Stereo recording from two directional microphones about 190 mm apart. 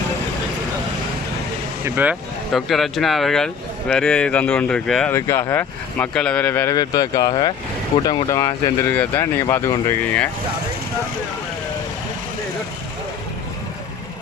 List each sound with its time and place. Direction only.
1.8 s speech: 10° right (ahead or behind); by 6.7 s 10° left (ahead or behind)
6.7 s speech: 20° left (ahead or behind)